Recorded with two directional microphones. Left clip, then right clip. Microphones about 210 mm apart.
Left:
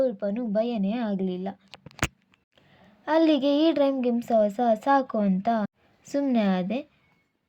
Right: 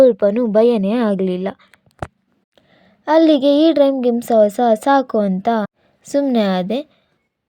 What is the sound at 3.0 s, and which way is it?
A woman's voice, 35° right (ahead or behind).